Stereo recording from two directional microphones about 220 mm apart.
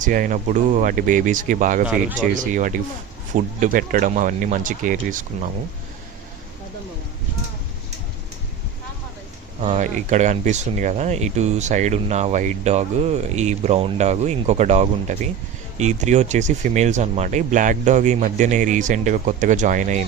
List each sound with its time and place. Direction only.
0.0 s speech: 35° right (ahead or behind)
9.6 s speech: 30° right (ahead or behind)